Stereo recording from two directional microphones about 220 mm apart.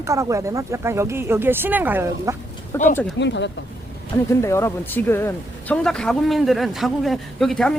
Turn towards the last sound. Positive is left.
turn(degrees=0)  # may be behind; listen again after turning